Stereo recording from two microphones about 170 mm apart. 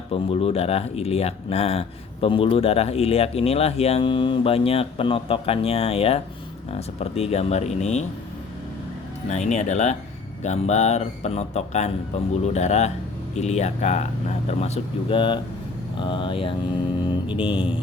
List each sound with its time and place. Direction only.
0.1 s speech: 35° left (ahead or behind)
9.3 s speech: 40° left (ahead or behind)